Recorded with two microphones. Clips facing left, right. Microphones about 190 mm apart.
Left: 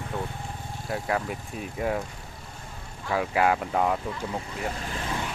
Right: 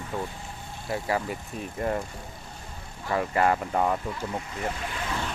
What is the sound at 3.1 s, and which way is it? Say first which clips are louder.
Speech: even; centre (ahead or behind).